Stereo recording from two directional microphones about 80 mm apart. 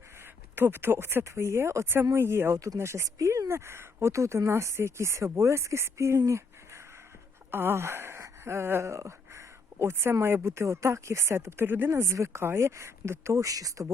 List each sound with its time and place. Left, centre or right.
0.5 s speech: right
7.5 s speech: right
11.9 s speech: right